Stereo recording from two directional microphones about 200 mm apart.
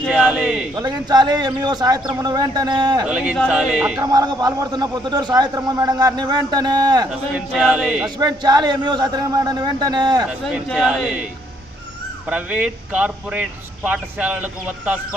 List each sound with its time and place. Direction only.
0.1 s a sound: 5° right (ahead or behind)
0.8 s a man's voice: 20° right (ahead or behind)
3.1 s speech: 5° right (ahead or behind)
4.1 s a man's voice: 20° right (ahead or behind)
7.3 s speech: 5° right (ahead or behind)
8.2 s a man's voice: 20° right (ahead or behind)
10.5 s speech: 5° right (ahead or behind)
12.3 s speech: 5° right (ahead or behind)